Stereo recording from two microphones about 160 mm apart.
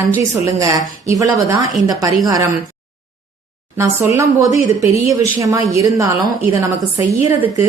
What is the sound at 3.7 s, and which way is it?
A woman's voice, 20° right (ahead or behind).